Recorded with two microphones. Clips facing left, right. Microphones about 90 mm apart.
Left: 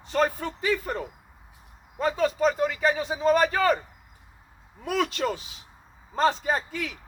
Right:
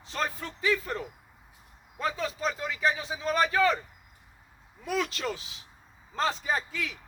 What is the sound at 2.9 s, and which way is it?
Speech, 45° left (ahead or behind).